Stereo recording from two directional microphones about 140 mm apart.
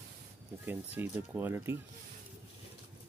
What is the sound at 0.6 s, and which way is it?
Speech, 15° right (ahead or behind).